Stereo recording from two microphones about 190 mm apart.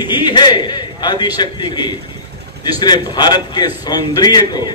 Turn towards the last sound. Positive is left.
turn(degrees=20)  # may be behind; listen again after turning